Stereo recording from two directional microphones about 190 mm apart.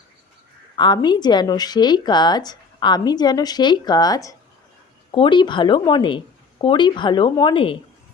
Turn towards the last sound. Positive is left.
turn(degrees=25)  # may be behind; listen again after turning